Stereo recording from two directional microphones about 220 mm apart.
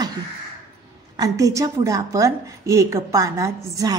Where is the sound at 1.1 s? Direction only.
15° right (ahead or behind).